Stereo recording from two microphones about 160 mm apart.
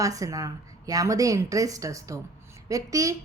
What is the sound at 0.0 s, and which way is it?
A woman's voice, 20° right (ahead or behind).